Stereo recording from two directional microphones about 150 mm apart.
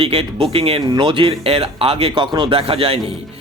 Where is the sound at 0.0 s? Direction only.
40° right (ahead or behind).